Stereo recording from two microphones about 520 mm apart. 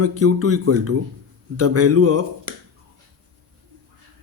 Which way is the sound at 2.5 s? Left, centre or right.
Right.